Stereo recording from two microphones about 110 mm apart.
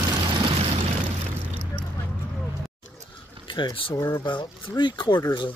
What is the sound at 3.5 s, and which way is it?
Speech, 45° left (ahead or behind).